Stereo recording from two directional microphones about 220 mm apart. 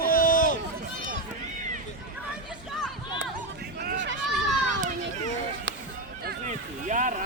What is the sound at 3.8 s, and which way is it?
Run, 50° right (ahead or behind).